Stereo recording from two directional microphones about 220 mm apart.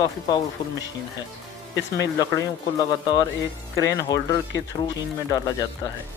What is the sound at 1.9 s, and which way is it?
Speech, 15° left (ahead or behind).